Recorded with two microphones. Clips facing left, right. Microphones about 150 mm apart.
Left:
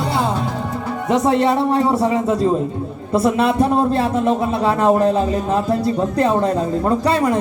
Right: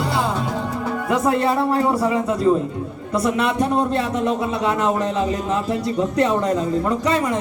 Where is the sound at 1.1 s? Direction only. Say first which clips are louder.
Left 4 dB; 25° left (ahead or behind).